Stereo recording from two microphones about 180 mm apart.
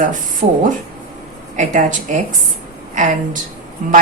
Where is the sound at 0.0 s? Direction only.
45° right (ahead or behind).